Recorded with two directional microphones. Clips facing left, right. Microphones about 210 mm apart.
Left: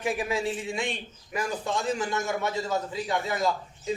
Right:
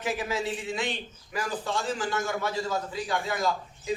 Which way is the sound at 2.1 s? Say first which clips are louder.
Left 1 dB; 25° left (ahead or behind).